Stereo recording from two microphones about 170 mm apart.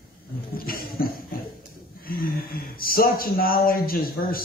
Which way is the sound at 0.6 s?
60° left (ahead or behind).